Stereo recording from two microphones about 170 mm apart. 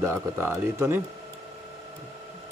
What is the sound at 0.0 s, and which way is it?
Speech, 15° right (ahead or behind).